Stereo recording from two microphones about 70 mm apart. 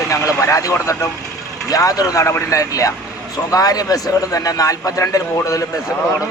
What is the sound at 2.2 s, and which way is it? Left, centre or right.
A man's voice, left.